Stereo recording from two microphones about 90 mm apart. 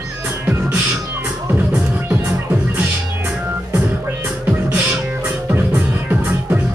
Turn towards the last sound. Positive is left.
turn(degrees=-20)  # may be behind; listen again after turning